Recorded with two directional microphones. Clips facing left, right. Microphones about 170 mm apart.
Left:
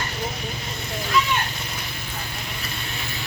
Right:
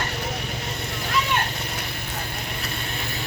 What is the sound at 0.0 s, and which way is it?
Vehicle, 65° right (ahead or behind).